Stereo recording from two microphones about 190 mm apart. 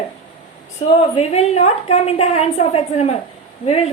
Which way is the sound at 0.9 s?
35° left (ahead or behind).